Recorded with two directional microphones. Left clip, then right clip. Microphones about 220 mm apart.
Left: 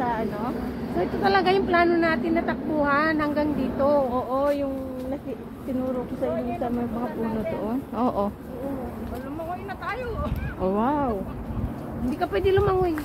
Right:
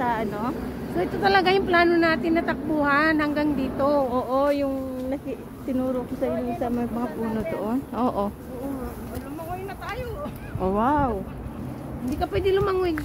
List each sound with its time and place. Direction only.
0.0 s a sound: 40° right (ahead or behind)
0.9 s speech: 45° right (ahead or behind)
7.9 s speech: 15° right (ahead or behind)
10.6 s speech: 10° right (ahead or behind)
12.2 s speech: 10° right (ahead or behind)